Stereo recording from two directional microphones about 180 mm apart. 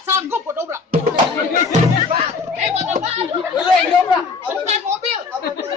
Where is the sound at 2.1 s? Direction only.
40° right (ahead or behind).